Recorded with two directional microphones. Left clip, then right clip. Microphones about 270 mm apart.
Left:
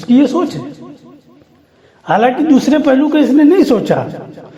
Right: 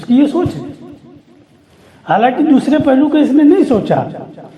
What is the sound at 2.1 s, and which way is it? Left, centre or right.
Speech, left.